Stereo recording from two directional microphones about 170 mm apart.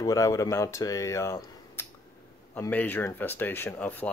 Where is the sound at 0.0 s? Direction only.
20° left (ahead or behind).